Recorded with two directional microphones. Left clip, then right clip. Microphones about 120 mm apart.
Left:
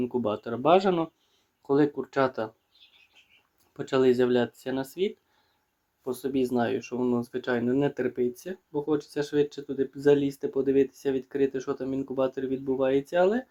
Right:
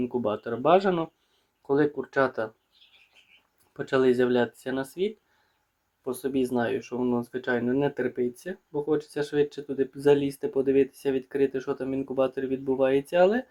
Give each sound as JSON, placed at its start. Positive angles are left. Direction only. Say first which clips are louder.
{"t": 0.0, "sound": "speech", "louder": "right 1 dB", "side_deg": 5}
{"t": 3.8, "sound": "speech", "louder": "even", "side_deg": 0}